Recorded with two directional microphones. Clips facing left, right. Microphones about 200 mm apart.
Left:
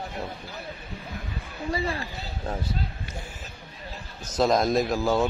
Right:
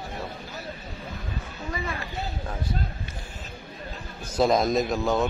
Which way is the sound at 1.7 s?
30° left (ahead or behind).